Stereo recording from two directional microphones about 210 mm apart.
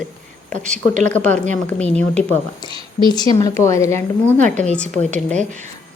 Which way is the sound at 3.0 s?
20° left (ahead or behind).